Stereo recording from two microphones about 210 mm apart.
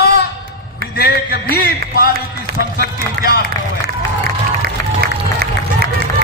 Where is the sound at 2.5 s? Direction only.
50° right (ahead or behind).